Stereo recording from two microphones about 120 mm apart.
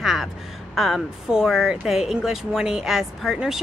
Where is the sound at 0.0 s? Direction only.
5° right (ahead or behind).